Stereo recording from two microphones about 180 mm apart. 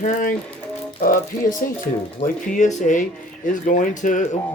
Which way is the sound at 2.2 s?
45° left (ahead or behind).